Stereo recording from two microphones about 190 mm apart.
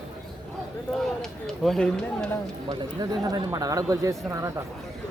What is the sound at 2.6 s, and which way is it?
Speech, 20° right (ahead or behind).